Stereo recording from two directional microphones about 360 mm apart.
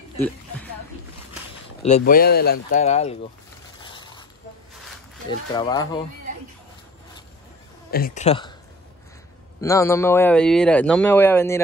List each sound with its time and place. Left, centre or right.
1.8 s speech: centre
3.8 s a sound: centre
5.5 s speech: centre
7.9 s speech: left
9.6 s speech: centre